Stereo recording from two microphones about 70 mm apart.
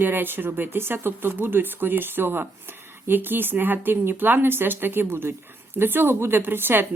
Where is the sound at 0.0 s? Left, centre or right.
Right.